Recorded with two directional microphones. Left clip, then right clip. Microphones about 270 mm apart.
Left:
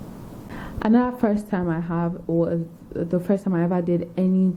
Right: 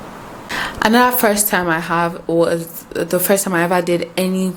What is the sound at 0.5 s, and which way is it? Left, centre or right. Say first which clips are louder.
A woman's voice: right 8 dB; centre.